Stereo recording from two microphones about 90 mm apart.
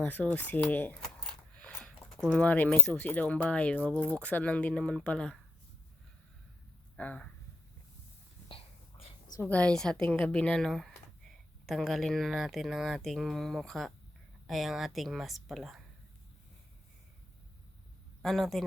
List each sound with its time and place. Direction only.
0.0 s speech: 20° left (ahead or behind)
1.0 s keys jangling: centre (ahead or behind)
1.5 s a sound: 15° left (ahead or behind)
2.3 s speech: 15° left (ahead or behind)
6.9 s speech: 15° left (ahead or behind)
8.4 s a sound: 90° left
9.4 s speech: 15° left (ahead or behind); by 15.8 s centre (ahead or behind)
18.2 s speech: centre (ahead or behind)